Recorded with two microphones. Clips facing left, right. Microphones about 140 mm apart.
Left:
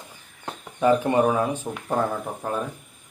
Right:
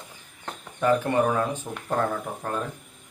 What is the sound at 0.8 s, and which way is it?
Speech, 15° left (ahead or behind).